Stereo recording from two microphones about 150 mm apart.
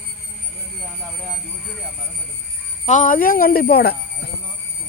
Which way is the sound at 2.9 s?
60° left (ahead or behind).